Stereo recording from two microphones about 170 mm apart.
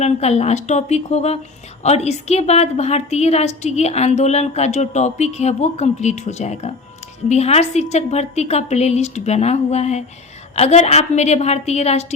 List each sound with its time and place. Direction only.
0.0 s a woman's voice: 40° left (ahead or behind)